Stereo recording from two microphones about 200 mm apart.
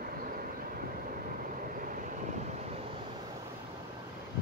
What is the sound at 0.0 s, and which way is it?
Vehicle, 45° right (ahead or behind).